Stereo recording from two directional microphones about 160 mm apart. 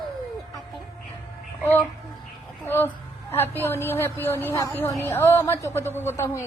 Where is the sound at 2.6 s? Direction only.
15° left (ahead or behind).